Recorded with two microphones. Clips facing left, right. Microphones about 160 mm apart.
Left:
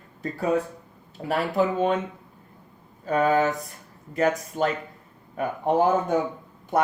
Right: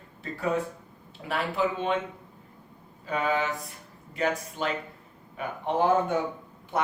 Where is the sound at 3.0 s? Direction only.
45° left (ahead or behind).